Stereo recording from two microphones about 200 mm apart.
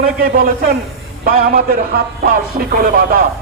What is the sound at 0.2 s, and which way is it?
A man's voice, 45° right (ahead or behind).